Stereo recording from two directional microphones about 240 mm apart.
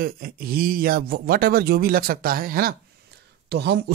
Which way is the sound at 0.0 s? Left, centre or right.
Right.